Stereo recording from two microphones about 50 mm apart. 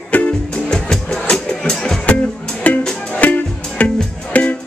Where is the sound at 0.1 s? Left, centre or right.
Left.